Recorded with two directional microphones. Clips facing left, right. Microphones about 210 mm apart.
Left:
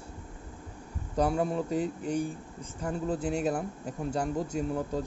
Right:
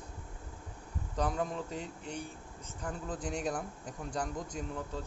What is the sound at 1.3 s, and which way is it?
Speech, 35° left (ahead or behind).